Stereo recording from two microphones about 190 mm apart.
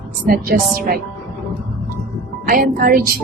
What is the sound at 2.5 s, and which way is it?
Speech, 50° right (ahead or behind).